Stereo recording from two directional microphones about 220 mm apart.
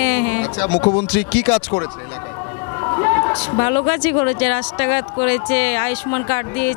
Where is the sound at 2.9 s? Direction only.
20° left (ahead or behind).